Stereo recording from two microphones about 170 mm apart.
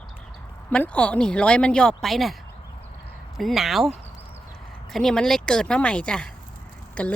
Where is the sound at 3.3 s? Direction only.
Centre (ahead or behind).